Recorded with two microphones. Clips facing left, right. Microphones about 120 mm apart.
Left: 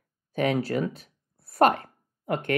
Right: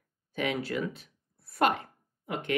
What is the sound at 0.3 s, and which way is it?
Speech, 45° left (ahead or behind).